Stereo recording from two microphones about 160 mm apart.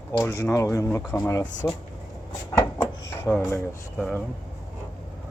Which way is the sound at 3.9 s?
5° left (ahead or behind).